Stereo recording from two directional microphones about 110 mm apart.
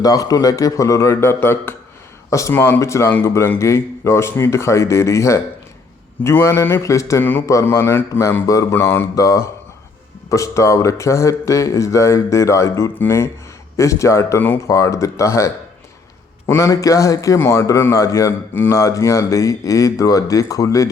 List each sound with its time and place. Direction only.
0.0 s a man's voice: 35° left (ahead or behind)
14.4 s speech: 15° left (ahead or behind)
14.8 s a man's voice: 30° left (ahead or behind)